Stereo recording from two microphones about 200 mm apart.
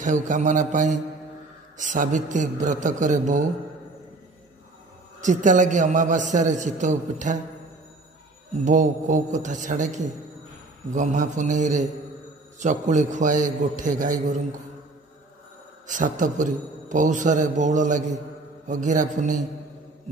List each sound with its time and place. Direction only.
0.0 s a man's voice: 40° right (ahead or behind)
5.2 s a man's voice: 40° right (ahead or behind)
8.6 s a man's voice: 40° right (ahead or behind)
15.9 s a man's voice: 40° right (ahead or behind)